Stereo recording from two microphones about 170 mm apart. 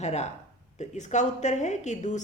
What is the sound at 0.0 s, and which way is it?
A woman's voice, 40° left (ahead or behind).